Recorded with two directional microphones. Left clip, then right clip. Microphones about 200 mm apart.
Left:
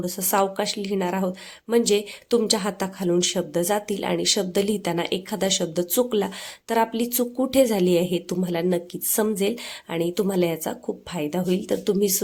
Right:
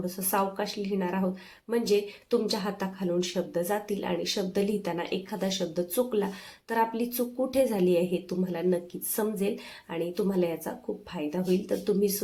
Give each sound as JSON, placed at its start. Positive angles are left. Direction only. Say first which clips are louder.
{"t": 0.0, "sound": "a woman's voice", "louder": "left 6 dB", "side_deg": 45}